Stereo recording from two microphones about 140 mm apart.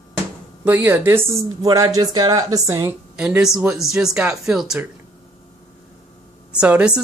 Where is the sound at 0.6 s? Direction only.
15° right (ahead or behind).